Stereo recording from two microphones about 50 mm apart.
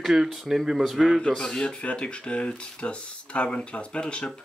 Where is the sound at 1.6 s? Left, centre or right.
Left.